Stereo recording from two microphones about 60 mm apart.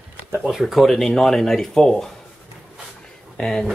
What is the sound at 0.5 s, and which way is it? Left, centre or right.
Speech, centre.